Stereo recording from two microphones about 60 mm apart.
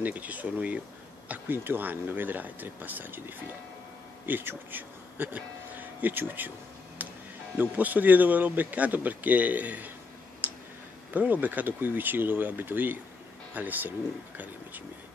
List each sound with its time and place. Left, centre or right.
0.0 s speech: right
1.3 s speech: right
7.0 s music: right
7.5 s speech: right
10.4 s tick: right
11.1 s speech: right